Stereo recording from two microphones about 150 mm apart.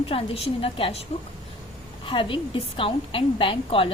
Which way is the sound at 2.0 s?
35° left (ahead or behind).